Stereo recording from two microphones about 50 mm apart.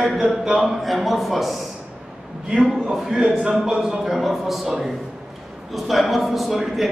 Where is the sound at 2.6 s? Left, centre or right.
Centre.